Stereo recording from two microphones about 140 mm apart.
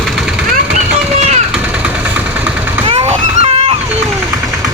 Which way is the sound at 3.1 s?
40° right (ahead or behind).